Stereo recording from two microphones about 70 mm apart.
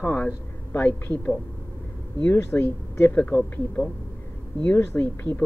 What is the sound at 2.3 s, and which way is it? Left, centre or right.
Speech, left.